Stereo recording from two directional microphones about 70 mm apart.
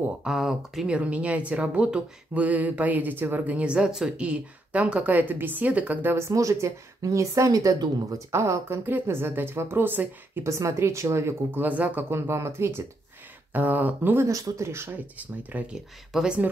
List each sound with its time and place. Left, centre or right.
0.2 s speech: centre
0.8 s speech: centre
6.1 s speech: right
8.3 s a woman's voice: right
10.4 s a woman's voice: right
11.6 s speech: right
12.1 s a woman's voice: right
13.5 s speech: right
14.6 s a woman's voice: right
15.1 s speech: centre